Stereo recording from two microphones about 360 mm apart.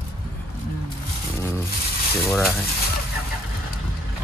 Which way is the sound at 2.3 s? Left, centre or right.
Centre.